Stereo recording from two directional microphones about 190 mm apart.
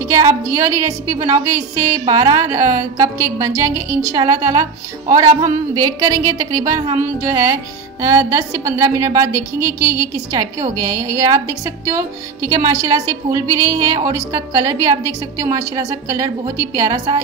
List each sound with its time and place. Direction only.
0.1 s a woman's voice: 15° right (ahead or behind)